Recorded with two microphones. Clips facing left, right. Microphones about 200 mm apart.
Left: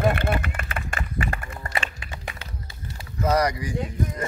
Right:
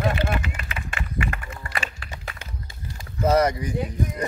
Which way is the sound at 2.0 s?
20° left (ahead or behind).